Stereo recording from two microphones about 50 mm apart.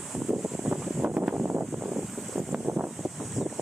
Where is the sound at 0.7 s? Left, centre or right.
Right.